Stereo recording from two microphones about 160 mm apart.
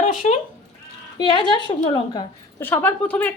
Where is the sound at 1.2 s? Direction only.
30° left (ahead or behind).